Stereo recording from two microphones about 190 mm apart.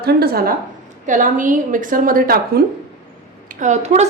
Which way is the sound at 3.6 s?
35° right (ahead or behind).